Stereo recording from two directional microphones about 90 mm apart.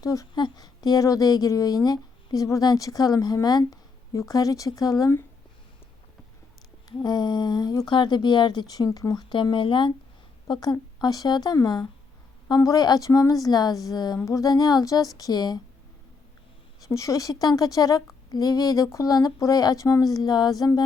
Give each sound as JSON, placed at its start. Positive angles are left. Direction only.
{"t": 0.0, "sound": "a woman's voice", "side_deg": 40}
{"t": 0.3, "sound": "a woman's voice", "side_deg": 55}
{"t": 6.8, "sound": "speech", "side_deg": 50}
{"t": 9.3, "sound": "speech", "side_deg": 65}
{"t": 10.5, "sound": "a woman's voice", "side_deg": 50}
{"t": 14.3, "sound": "speech", "side_deg": 40}
{"t": 16.9, "sound": "a woman's voice", "side_deg": 35}